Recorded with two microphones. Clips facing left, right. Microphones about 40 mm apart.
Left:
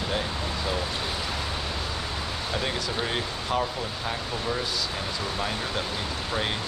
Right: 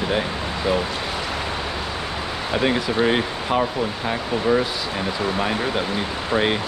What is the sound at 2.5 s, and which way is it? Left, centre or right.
Speech, right.